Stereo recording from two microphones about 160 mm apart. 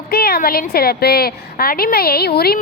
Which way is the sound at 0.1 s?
75° left (ahead or behind).